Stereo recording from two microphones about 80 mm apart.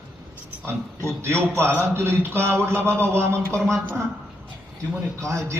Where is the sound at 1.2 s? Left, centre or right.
Right.